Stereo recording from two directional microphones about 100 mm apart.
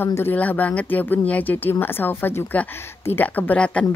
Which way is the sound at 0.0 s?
20° left (ahead or behind).